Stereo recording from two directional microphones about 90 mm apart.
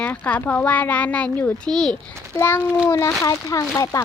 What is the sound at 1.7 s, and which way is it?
Speech, 5° left (ahead or behind).